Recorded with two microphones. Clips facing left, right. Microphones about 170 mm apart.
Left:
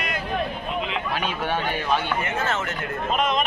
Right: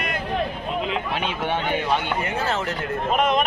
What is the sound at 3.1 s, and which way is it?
Speech, 55° right (ahead or behind).